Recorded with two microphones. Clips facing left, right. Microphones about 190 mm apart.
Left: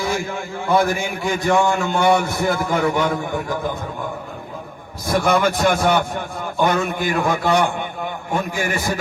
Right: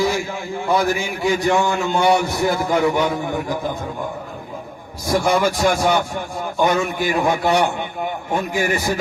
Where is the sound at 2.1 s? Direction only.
55° left (ahead or behind).